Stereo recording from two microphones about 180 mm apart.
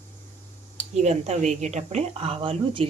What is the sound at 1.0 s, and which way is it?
Speech, 40° right (ahead or behind).